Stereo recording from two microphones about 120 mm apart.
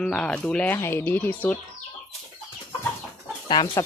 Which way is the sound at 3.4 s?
40° left (ahead or behind).